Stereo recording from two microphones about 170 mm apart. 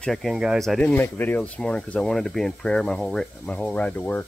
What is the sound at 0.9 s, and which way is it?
Speech, 10° left (ahead or behind).